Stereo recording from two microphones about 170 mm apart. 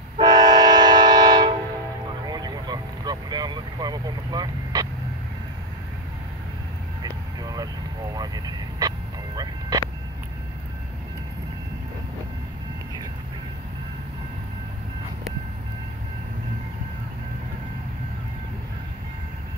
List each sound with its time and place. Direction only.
0.2 s train: 25° right (ahead or behind)
2.2 s vehicle: 25° right (ahead or behind)
7.0 s vehicle: 25° right (ahead or behind)